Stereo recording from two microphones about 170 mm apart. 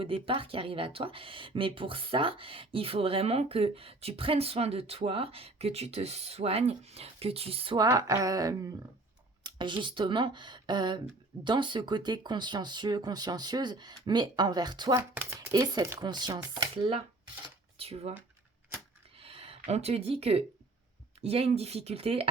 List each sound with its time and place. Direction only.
0.0 s speech: 30° right (ahead or behind)
7.9 s speech: 20° right (ahead or behind); by 18.1 s 35° right (ahead or behind)
19.2 s speech: 35° right (ahead or behind)